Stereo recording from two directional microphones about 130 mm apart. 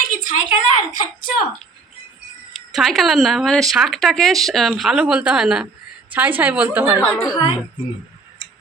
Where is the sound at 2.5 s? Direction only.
Centre (ahead or behind).